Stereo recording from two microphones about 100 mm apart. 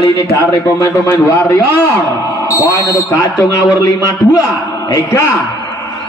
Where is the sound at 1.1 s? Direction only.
20° left (ahead or behind).